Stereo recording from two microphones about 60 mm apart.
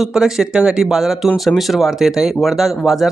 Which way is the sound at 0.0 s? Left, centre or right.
Centre.